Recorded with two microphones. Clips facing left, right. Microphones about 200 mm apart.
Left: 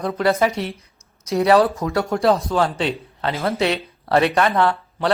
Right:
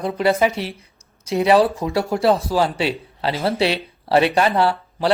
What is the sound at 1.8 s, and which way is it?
Speech, 30° right (ahead or behind).